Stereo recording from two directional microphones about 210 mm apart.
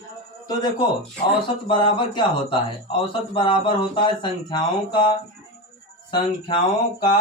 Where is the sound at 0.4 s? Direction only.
20° left (ahead or behind).